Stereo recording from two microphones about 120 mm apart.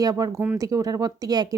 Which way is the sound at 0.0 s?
30° right (ahead or behind).